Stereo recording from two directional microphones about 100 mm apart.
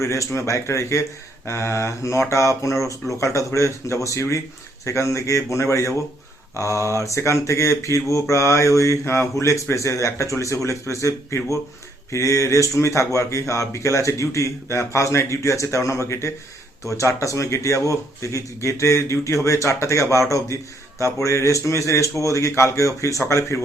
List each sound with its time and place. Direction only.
0.0 s mantra: 30° left (ahead or behind)
3.1 s speech: 30° left (ahead or behind)